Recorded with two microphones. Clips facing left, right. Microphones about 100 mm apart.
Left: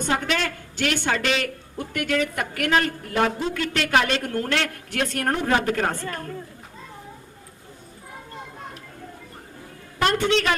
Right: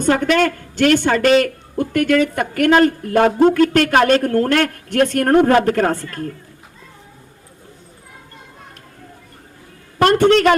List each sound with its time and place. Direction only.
0.0 s a woman's voice: 50° right (ahead or behind)
10.0 s a woman's voice: 50° right (ahead or behind)